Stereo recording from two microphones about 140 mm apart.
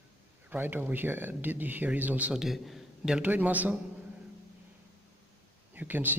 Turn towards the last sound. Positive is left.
turn(degrees=-15)  # may be behind; listen again after turning